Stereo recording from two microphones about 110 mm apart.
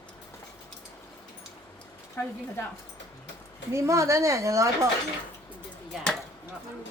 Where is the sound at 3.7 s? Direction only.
30° right (ahead or behind).